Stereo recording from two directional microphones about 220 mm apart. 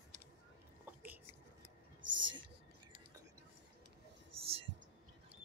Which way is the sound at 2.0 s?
90° right.